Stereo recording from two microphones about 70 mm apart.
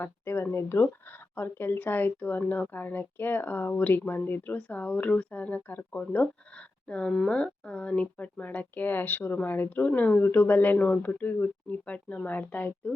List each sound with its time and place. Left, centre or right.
0.0 s speech: left
10.2 s speech: left